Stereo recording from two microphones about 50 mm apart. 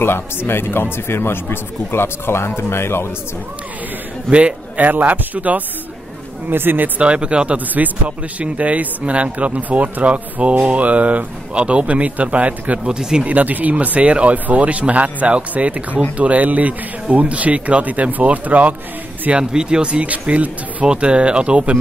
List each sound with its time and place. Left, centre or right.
0.0 s speech: left
4.3 s speech: right
6.5 s speech: right
7.0 s speech: right
12.8 s speech: centre
13.3 s speech: right
19.3 s speech: centre